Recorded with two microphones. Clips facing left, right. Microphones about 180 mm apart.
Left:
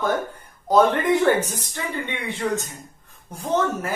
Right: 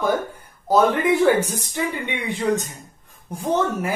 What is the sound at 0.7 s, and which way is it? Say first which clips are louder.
Speech: even; 10° right (ahead or behind).